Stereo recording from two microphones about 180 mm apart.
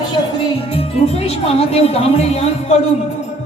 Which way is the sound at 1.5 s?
35° left (ahead or behind).